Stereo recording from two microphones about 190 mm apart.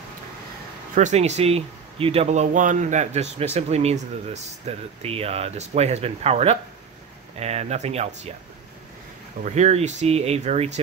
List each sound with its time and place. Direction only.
0.9 s speech: 40° right (ahead or behind)
9.4 s speech: 35° right (ahead or behind)